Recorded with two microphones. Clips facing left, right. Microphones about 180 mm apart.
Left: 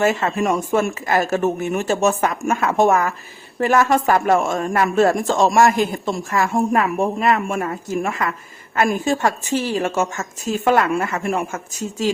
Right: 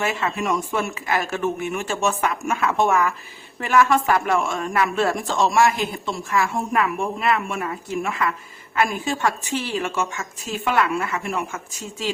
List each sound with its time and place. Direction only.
0.0 s speech: 40° left (ahead or behind)